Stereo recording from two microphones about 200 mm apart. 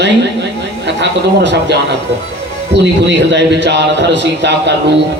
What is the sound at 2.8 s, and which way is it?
A woman's voice, 60° right (ahead or behind).